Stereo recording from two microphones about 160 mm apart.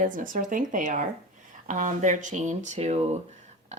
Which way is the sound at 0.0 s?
55° right (ahead or behind).